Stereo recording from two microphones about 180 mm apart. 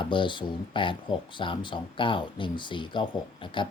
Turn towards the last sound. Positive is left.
turn(degrees=25)  # may be behind; listen again after turning